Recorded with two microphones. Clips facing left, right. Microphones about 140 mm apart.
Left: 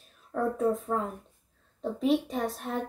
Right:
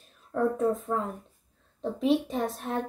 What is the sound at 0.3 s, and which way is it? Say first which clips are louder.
A woman's voice: right 1 dB; centre (ahead or behind).